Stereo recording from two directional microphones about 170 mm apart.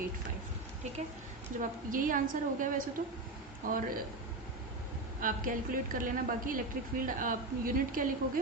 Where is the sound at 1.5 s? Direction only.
50° right (ahead or behind).